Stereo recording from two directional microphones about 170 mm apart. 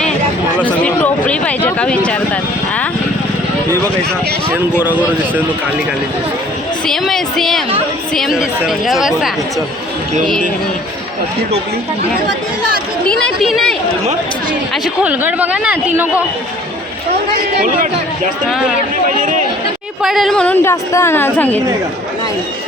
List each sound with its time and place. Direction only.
0.6 s a sound: 10° left (ahead or behind)
4.8 s a man's voice: 10° right (ahead or behind)
6.8 s a woman's voice: centre (ahead or behind)
13.1 s a woman's voice: 5° left (ahead or behind)
19.0 s speech: 50° right (ahead or behind)
20.0 s a woman's voice: centre (ahead or behind)